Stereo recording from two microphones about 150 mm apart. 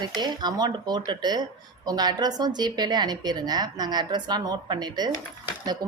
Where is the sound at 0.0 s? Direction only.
30° right (ahead or behind).